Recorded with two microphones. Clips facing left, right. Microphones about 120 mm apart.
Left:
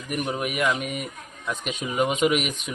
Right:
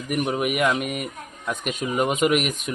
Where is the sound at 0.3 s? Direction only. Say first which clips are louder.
Right 2 dB; 5° right (ahead or behind).